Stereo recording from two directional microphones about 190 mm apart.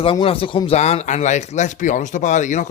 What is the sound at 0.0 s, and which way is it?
A man's voice, 25° left (ahead or behind).